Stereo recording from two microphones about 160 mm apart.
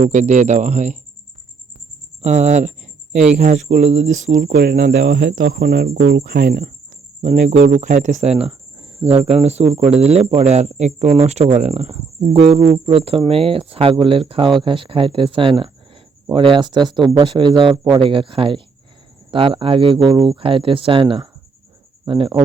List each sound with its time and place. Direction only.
0.0 s speech: 50° right (ahead or behind)
2.2 s a sound: 45° right (ahead or behind)
3.3 s speech: 45° right (ahead or behind)
4.5 s speech: 75° right (ahead or behind)
7.2 s speech: 50° right (ahead or behind)